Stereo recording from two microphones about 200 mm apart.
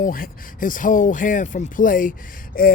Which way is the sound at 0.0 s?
45° left (ahead or behind).